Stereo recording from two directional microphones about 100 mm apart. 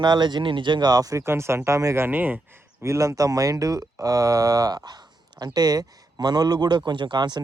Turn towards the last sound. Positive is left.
turn(degrees=-45)  # may be behind; listen again after turning